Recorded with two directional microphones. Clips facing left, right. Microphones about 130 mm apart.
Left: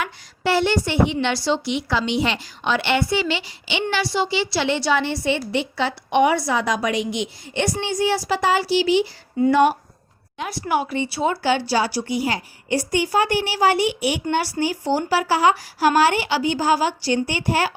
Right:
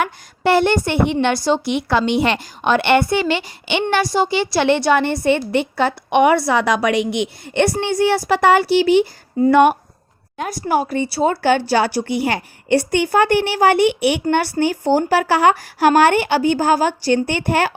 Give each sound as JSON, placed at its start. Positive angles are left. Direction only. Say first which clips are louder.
{"t": 0.0, "sound": "a woman's voice", "louder": "right 6 dB", "side_deg": -55}
{"t": 10.3, "sound": "speech", "louder": "right 4 dB", "side_deg": -45}
{"t": 11.4, "sound": "a woman's voice", "louder": "right 5 dB", "side_deg": -50}